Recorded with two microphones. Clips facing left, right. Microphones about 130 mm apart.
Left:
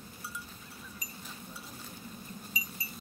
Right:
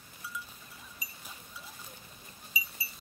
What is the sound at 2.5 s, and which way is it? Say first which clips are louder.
Wind chime: right 4 dB; 10° right (ahead or behind).